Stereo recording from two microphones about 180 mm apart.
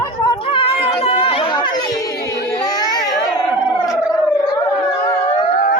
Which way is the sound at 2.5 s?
20° left (ahead or behind).